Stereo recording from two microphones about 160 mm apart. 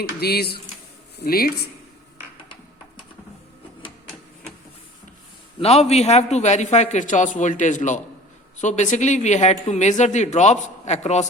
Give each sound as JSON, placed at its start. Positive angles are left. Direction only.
{"t": 0.2, "sound": "speech", "side_deg": 80}
{"t": 1.2, "sound": "speech", "side_deg": 65}
{"t": 5.5, "sound": "a man's voice", "side_deg": 40}